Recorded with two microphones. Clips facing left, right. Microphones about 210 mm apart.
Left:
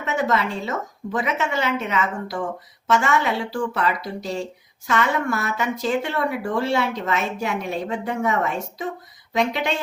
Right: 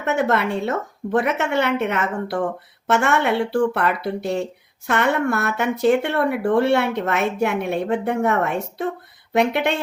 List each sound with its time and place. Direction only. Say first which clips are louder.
0.0 s speech: right 3 dB; 60° right (ahead or behind)